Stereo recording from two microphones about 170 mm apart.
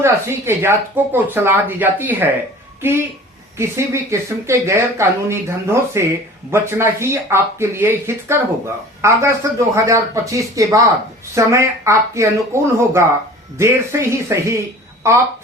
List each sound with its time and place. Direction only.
0.0 s speech: 15° right (ahead or behind)
3.6 s speech: 15° right (ahead or behind)